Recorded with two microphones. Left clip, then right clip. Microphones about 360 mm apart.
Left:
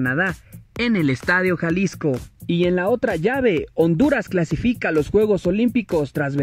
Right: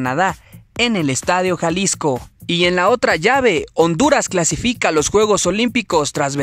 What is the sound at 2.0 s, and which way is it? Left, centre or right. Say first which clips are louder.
Speech: right 5 dB; right.